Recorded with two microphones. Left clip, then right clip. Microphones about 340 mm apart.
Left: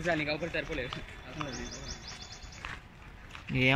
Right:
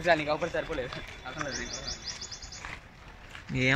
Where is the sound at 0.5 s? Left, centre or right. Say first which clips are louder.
Right 3 dB; right.